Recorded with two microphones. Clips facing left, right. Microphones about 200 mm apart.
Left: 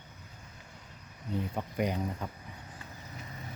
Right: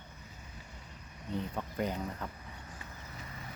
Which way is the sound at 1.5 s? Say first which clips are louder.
Left 4 dB; 15° left (ahead or behind).